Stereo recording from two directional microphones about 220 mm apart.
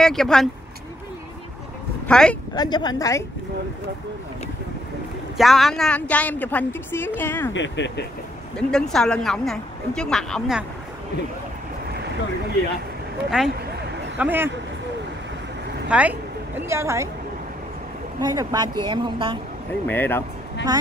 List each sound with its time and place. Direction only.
0.0 s speech: centre (ahead or behind)
2.0 s speech: 5° left (ahead or behind)
2.5 s speech: 20° left (ahead or behind)
5.4 s speech: centre (ahead or behind)
7.5 s speech: 55° left (ahead or behind)
8.5 s speech: 5° left (ahead or behind)
13.4 s a woman's voice: 5° right (ahead or behind)
15.9 s a woman's voice: 5° right (ahead or behind)
18.2 s speech: 15° right (ahead or behind)
19.9 s speech: 10° left (ahead or behind)